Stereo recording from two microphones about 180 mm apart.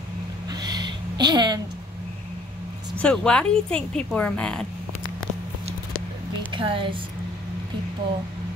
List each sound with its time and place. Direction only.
0.5 s a sound: 20° right (ahead or behind)
3.0 s speech: 5° left (ahead or behind)
6.5 s a woman's voice: 30° right (ahead or behind)